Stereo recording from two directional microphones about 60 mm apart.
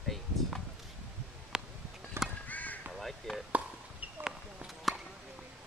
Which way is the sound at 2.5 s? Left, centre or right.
Left.